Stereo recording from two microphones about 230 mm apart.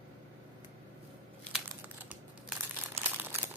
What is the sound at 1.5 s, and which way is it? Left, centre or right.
Crumpling, centre.